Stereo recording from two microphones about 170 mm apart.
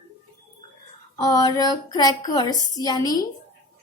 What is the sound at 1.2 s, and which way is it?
A woman's voice, 20° left (ahead or behind).